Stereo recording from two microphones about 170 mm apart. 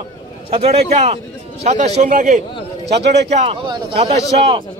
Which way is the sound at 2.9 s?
80° right.